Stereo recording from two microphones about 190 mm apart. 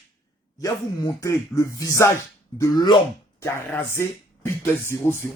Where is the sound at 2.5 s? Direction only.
20° left (ahead or behind).